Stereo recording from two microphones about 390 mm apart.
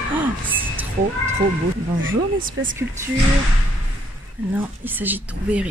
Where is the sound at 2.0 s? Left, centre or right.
Right.